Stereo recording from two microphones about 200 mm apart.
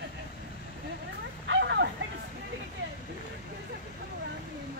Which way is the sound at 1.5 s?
60° right (ahead or behind).